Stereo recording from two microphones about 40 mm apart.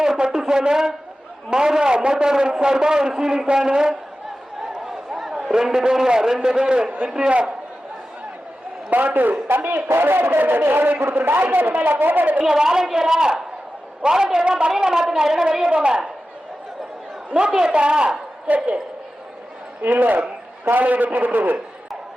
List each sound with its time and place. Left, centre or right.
0.0 s a man's voice: centre
4.9 s a sound: centre
5.6 s a man's voice: centre
8.9 s a man's voice: right
9.9 s a man's voice: right
11.1 s a man's voice: right
12.4 s a man's voice: centre
17.3 s a woman's voice: right
18.4 s a woman's voice: right
19.8 s a man's voice: right